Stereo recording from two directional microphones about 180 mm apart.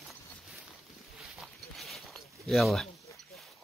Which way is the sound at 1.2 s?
Centre (ahead or behind).